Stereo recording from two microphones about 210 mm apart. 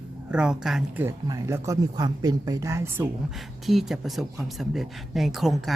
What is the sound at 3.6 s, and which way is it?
A woman's voice, centre (ahead or behind).